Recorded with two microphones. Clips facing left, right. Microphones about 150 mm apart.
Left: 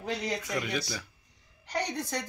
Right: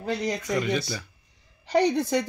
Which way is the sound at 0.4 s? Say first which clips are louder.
Right 6 dB; 5° left (ahead or behind).